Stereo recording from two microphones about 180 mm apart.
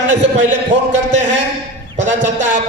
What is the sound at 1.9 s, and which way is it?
Speech, 40° right (ahead or behind).